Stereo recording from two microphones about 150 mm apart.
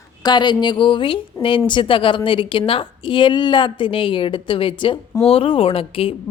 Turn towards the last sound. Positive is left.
turn(degrees=40)  # may be behind; listen again after turning